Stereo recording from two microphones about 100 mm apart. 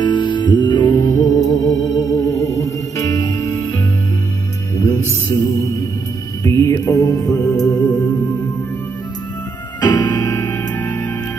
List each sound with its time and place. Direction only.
0.0 s music: 50° left (ahead or behind)
4.7 s music: 30° left (ahead or behind)
7.9 s music: 15° left (ahead or behind)
9.8 s music: 45° left (ahead or behind)
10.5 s music: 20° left (ahead or behind)